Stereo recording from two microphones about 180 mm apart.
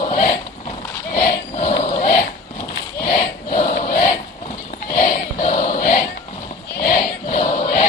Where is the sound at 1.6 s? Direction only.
30° left (ahead or behind).